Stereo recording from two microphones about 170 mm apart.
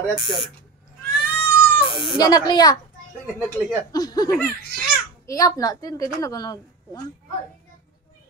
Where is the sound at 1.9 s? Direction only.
25° left (ahead or behind).